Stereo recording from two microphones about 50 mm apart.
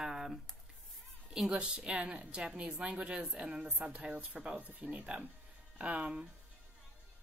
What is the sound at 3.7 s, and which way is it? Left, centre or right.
Speech, right.